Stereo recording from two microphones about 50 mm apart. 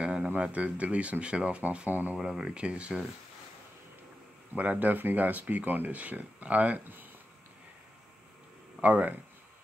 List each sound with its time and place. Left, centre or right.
0.0 s a sound: centre
0.4 s speech: right
1.9 s speech: right
2.1 s speech: centre
4.6 s speech: right
8.8 s speech: right